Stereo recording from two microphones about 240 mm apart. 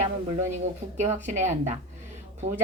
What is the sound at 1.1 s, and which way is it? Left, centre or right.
Speech, right.